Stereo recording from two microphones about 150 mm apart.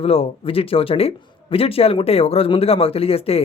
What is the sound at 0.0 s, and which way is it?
Speech, 40° left (ahead or behind).